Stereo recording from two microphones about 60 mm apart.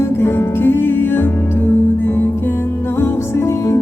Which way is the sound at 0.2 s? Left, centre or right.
Left.